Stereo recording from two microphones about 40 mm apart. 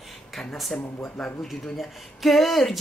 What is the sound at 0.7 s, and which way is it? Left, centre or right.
Speech, left.